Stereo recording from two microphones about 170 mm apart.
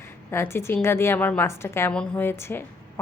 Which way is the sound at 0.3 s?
15° left (ahead or behind).